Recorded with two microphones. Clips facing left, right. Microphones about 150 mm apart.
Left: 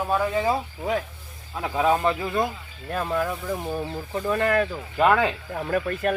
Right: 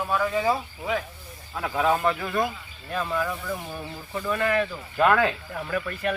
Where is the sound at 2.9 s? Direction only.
45° left (ahead or behind).